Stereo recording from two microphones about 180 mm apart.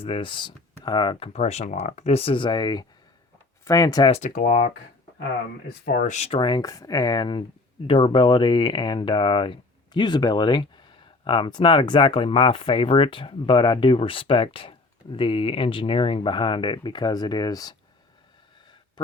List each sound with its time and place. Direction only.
0.0 s speech: 30° left (ahead or behind)
4.1 s speech: 45° left (ahead or behind)
5.8 s speech: 50° left (ahead or behind); by 17.7 s 20° left (ahead or behind)
19.0 s a sound: 25° left (ahead or behind)